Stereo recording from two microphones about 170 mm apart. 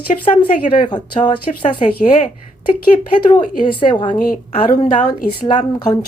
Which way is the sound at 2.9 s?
40° left (ahead or behind).